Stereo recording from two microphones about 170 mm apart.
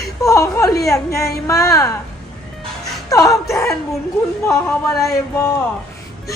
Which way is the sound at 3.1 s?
20° left (ahead or behind).